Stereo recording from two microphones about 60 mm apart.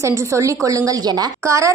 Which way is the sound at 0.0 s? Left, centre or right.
Right.